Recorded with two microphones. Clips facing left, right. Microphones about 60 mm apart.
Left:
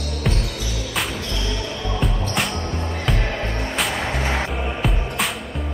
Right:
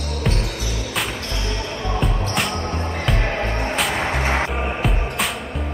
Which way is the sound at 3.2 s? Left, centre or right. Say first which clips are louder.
Right 3 dB; right.